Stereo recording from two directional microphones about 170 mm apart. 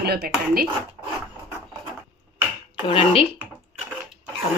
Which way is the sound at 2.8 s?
30° left (ahead or behind).